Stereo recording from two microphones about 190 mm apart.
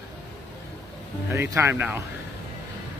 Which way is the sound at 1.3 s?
15° right (ahead or behind).